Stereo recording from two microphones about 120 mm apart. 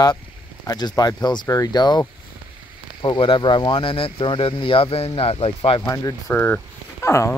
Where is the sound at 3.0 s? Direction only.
45° left (ahead or behind).